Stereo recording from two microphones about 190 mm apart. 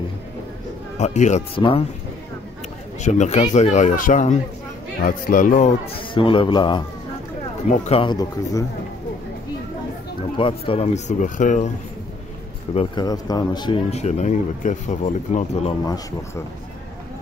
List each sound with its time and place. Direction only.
0.9 s speech: 35° left (ahead or behind)
3.0 s speech: 40° left (ahead or behind)
6.1 s a man's voice: 25° left (ahead or behind)
10.3 s speech: 30° left (ahead or behind)
12.7 s a man's voice: 20° left (ahead or behind)
13.8 s speech: 35° left (ahead or behind)